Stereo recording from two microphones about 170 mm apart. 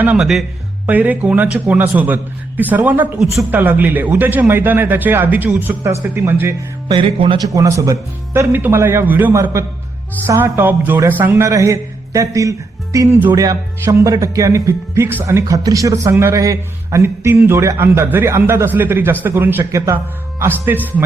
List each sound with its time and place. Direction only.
0.0 s a man's voice: 5° right (ahead or behind)
6.8 s speech: 30° right (ahead or behind)